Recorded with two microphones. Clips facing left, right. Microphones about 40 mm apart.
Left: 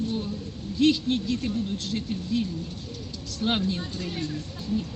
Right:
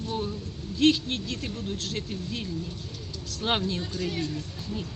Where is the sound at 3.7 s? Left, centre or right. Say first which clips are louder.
Even; right.